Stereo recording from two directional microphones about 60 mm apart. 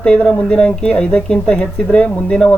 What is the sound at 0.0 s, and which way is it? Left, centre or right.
Speech, centre.